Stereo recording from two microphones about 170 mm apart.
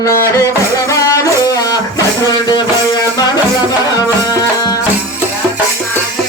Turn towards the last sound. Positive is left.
turn(degrees=20)  # may be behind; listen again after turning